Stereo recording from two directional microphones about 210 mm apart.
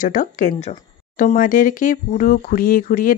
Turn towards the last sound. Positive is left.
turn(degrees=40)  # may be behind; listen again after turning